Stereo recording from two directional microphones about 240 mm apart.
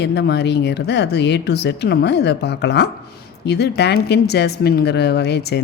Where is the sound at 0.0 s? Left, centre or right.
Left.